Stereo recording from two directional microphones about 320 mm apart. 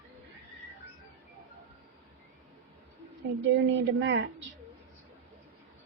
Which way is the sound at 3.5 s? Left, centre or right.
Right.